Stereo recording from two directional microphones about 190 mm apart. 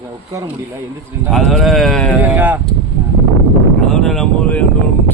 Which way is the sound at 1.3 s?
Centre (ahead or behind).